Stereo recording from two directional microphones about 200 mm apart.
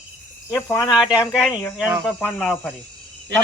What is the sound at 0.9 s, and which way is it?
Speech, 5° right (ahead or behind).